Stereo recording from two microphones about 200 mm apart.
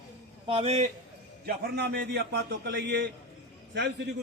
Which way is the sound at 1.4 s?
55° right (ahead or behind).